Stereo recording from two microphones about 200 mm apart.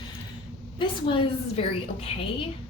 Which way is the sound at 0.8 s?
25° left (ahead or behind).